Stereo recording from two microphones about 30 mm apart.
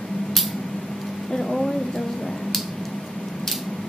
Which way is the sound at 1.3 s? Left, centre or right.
Centre.